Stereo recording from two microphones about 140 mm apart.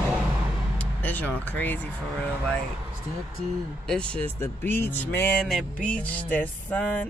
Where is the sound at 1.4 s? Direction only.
10° left (ahead or behind).